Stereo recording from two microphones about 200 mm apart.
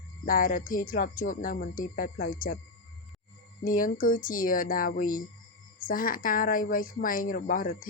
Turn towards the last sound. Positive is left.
turn(degrees=45)  # may be behind; listen again after turning